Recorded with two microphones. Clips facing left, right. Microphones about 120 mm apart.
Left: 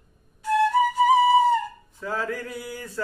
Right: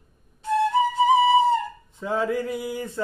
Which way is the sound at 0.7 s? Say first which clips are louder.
Right 1 dB; 25° right (ahead or behind).